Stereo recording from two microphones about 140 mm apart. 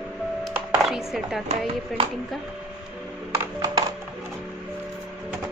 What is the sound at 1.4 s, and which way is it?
Speech, 40° right (ahead or behind).